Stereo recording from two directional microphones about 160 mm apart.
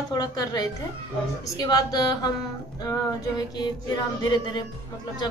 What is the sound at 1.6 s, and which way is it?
Music, 25° left (ahead or behind).